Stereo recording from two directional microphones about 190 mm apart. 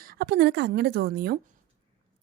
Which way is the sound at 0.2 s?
60° right (ahead or behind).